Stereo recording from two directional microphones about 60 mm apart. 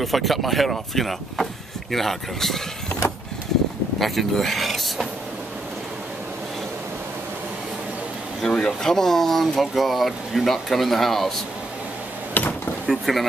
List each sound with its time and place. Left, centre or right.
0.0 s speech: centre
4.0 s speech: centre
8.4 s speech: centre
12.4 s a sound: left
12.9 s speech: centre